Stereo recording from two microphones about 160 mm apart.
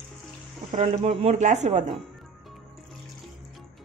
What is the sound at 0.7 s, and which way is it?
Speech, 40° right (ahead or behind).